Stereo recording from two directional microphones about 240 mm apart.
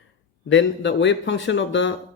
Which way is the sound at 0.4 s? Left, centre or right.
Left.